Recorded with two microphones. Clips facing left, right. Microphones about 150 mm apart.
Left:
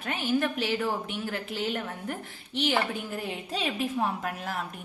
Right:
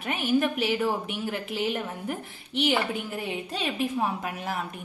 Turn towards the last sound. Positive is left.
turn(degrees=-5)  # may be behind; listen again after turning